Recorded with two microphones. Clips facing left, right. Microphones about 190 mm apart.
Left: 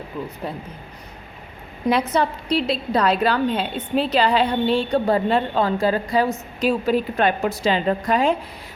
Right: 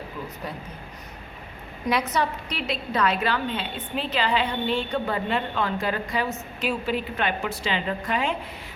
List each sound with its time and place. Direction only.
1.9 s a woman's voice: 30° left (ahead or behind)